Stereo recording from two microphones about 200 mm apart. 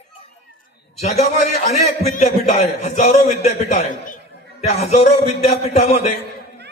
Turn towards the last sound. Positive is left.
turn(degrees=30)  # may be behind; listen again after turning